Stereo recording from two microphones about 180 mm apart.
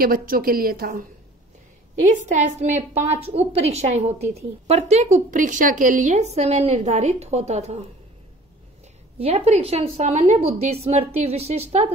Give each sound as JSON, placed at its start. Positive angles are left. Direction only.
{"t": 0.0, "sound": "a woman's voice", "side_deg": -55}
{"t": 2.0, "sound": "a woman's voice", "side_deg": -40}
{"t": 9.2, "sound": "a woman's voice", "side_deg": -35}